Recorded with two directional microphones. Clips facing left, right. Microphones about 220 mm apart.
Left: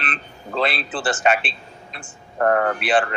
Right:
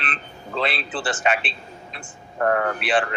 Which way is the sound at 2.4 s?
45° left (ahead or behind).